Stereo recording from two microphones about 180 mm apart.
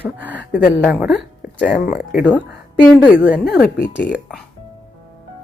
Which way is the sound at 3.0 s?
10° right (ahead or behind).